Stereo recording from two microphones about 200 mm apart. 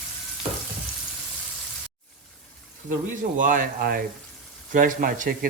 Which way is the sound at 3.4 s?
40° right (ahead or behind).